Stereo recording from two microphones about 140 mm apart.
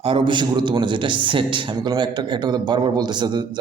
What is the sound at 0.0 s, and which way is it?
A man's voice, 35° right (ahead or behind).